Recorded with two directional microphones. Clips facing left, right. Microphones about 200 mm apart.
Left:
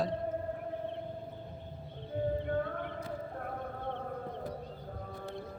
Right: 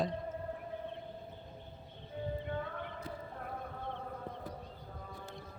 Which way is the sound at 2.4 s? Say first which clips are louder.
Left 6 dB; 50° left (ahead or behind).